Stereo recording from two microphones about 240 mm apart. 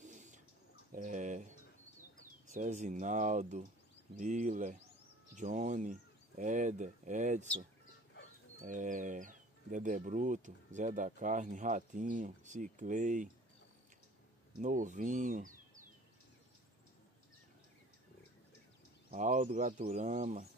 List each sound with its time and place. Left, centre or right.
0.0 s a sound: right
0.9 s bird: right
2.4 s speech: right
8.5 s speech: right
14.6 s speech: right
19.0 s speech: right